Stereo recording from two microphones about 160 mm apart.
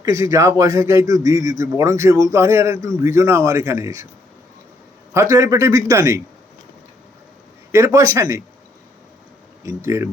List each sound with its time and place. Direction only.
0.0 s a man's voice: 20° right (ahead or behind)
5.1 s a man's voice: 20° right (ahead or behind)
7.7 s a man's voice: 20° right (ahead or behind)
9.6 s a man's voice: 20° right (ahead or behind)